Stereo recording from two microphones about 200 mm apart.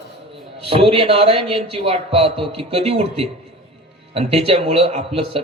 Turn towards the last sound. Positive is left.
turn(degrees=-30)  # may be behind; listen again after turning